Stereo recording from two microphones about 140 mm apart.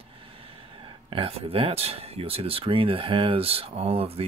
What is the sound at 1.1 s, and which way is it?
Speech, 45° right (ahead or behind).